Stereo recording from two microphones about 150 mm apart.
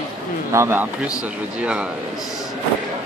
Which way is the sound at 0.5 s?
15° right (ahead or behind).